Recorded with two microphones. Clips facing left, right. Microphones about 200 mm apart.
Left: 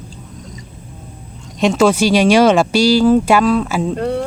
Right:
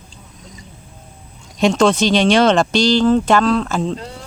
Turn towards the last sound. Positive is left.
turn(degrees=60)  # may be behind; listen again after turning